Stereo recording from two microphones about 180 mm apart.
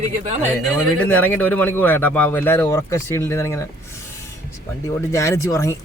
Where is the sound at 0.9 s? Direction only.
10° left (ahead or behind).